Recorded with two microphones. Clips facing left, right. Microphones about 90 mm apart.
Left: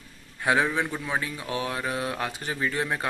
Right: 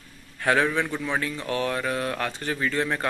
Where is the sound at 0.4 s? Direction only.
15° left (ahead or behind).